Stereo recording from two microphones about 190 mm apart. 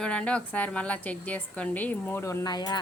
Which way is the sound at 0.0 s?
5° left (ahead or behind).